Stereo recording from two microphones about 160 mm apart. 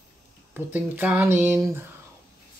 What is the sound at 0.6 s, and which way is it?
Speech, 10° right (ahead or behind).